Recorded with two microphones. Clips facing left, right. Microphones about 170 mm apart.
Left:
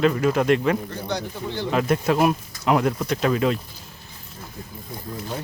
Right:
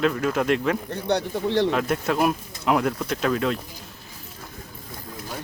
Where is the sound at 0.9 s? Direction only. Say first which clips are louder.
Right 4 dB; 65° right (ahead or behind).